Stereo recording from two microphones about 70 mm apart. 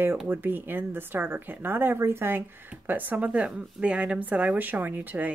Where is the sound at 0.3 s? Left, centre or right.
Right.